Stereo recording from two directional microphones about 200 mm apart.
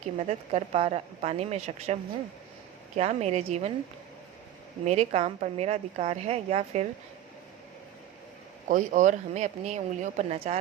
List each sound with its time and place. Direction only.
0.2 s a woman's voice: 30° right (ahead or behind)
3.0 s a woman's voice: 35° right (ahead or behind)
4.9 s a woman's voice: 35° right (ahead or behind)
8.7 s a woman's voice: 40° right (ahead or behind)